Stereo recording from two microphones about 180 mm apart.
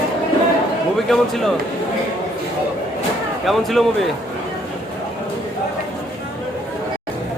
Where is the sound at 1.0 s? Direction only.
Centre (ahead or behind).